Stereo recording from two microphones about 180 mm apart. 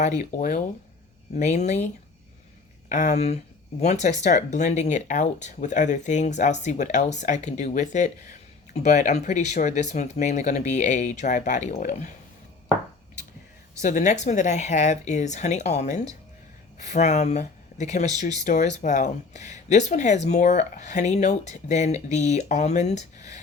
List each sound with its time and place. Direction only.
0.3 s speech: 50° left (ahead or behind)
2.9 s speech: 40° left (ahead or behind)
13.8 s speech: 40° left (ahead or behind)